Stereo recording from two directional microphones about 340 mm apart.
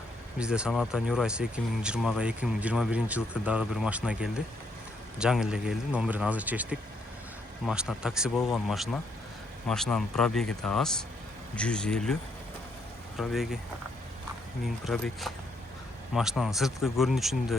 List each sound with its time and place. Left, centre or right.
0.3 s speech: centre
13.1 s speech: centre
14.6 s speech: centre